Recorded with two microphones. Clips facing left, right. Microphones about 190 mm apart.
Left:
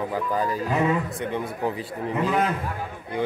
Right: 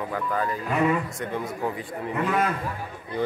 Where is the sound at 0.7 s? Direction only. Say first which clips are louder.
Right 2 dB; 20° left (ahead or behind).